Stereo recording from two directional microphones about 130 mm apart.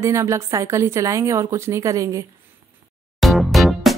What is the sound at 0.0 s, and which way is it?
Speech, 20° right (ahead or behind).